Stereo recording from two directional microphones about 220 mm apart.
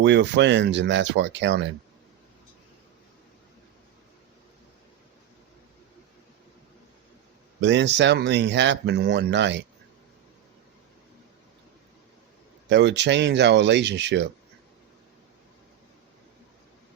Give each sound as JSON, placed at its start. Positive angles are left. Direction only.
{"t": 0.0, "sound": "speech", "side_deg": -55}
{"t": 7.6, "sound": "speech", "side_deg": -55}
{"t": 12.6, "sound": "speech", "side_deg": -55}